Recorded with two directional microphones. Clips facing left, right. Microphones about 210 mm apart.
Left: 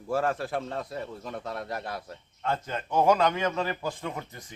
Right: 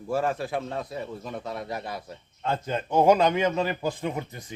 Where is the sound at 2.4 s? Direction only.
25° right (ahead or behind).